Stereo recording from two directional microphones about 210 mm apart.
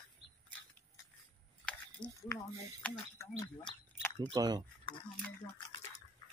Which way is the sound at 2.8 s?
15° left (ahead or behind).